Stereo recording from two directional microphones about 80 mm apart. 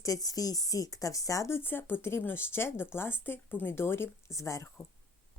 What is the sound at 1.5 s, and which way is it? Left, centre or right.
Speech, left.